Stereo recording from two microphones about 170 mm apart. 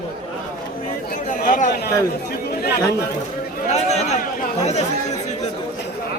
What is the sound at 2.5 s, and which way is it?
Chatter, 60° left (ahead or behind).